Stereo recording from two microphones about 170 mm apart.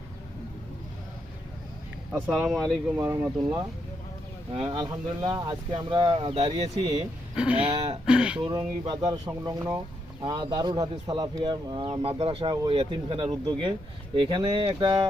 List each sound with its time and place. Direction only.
2.3 s speech: centre (ahead or behind)
2.6 s speech: 15° right (ahead or behind)
4.5 s speech: 30° right (ahead or behind)
7.3 s speech: 5° right (ahead or behind)
7.7 s speech: 35° right (ahead or behind)
8.0 s a sound: 5° right (ahead or behind)
8.4 s speech: 30° right (ahead or behind)